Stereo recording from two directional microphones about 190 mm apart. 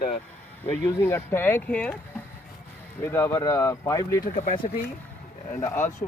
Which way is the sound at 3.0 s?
10° left (ahead or behind).